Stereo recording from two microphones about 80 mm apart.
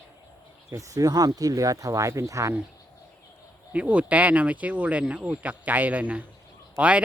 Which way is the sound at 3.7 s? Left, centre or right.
Centre.